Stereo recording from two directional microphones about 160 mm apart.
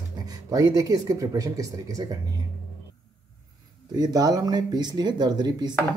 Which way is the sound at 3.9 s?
25° right (ahead or behind).